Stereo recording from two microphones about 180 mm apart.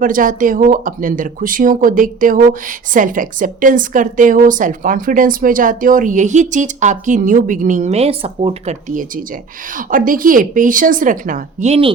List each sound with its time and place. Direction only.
0.0 s speech: 50° right (ahead or behind); by 8.7 s 30° right (ahead or behind)
9.7 s speech: 50° right (ahead or behind); by 11.9 s 30° right (ahead or behind)